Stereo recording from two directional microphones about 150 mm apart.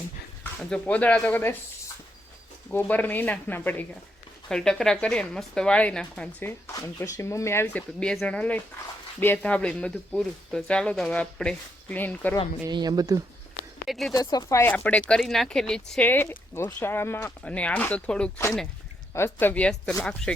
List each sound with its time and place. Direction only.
0.7 s a woman's voice: 10° left (ahead or behind)
2.7 s a woman's voice: 10° left (ahead or behind)
12.6 s speech: 25° right (ahead or behind)
13.8 s speech: centre (ahead or behind)
14.1 s speech: 25° left (ahead or behind)
14.6 s a woman's voice: 10° left (ahead or behind)